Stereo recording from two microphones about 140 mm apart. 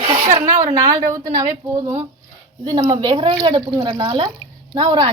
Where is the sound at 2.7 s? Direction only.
35° right (ahead or behind).